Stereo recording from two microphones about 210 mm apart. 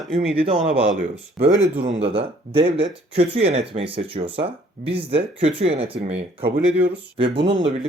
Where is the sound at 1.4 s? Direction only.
65° right (ahead or behind).